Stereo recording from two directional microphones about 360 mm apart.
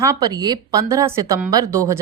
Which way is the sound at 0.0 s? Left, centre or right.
Centre.